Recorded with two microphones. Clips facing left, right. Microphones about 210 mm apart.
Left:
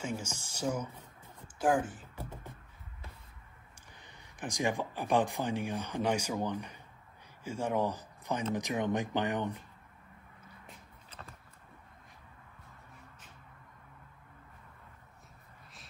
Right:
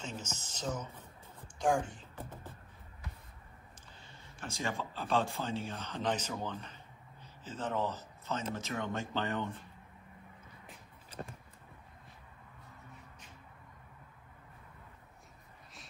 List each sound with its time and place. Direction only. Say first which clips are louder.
0.0 s speech: left 5 dB; 10° left (ahead or behind)
4.0 s speech: left 5 dB; 15° left (ahead or behind)